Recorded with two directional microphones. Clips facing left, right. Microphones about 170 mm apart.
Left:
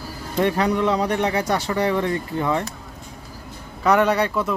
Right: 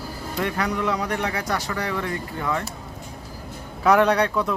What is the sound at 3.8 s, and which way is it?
Speech, centre (ahead or behind).